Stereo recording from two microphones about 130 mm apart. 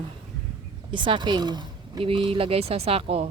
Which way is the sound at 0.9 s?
40° right (ahead or behind).